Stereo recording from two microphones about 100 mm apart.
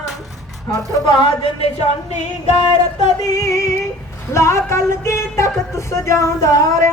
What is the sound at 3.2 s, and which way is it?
Speech, 35° left (ahead or behind).